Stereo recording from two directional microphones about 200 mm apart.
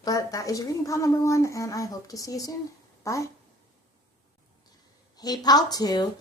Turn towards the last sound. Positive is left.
turn(degrees=20)  # may be behind; listen again after turning